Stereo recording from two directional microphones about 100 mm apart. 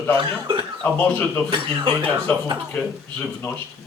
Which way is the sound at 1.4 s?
55° right (ahead or behind).